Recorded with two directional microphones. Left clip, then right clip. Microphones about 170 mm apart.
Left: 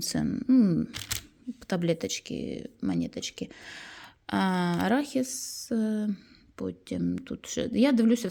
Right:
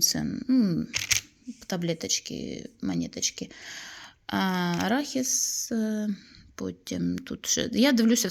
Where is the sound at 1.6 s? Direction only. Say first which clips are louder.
Left 2 dB; 25° left (ahead or behind).